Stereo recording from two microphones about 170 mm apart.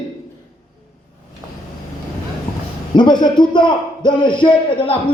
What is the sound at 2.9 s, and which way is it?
A man's voice, 25° left (ahead or behind).